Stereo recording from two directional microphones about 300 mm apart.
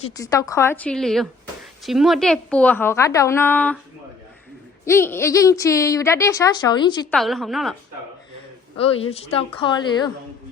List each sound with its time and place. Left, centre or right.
0.2 s a woman's voice: centre
4.9 s a woman's voice: centre
7.1 s a woman's voice: centre
8.8 s speech: centre